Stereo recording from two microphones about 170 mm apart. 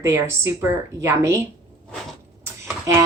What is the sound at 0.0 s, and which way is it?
A woman's voice, 15° right (ahead or behind).